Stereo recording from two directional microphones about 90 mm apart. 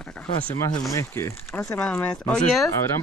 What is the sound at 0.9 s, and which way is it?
Speech, 30° left (ahead or behind).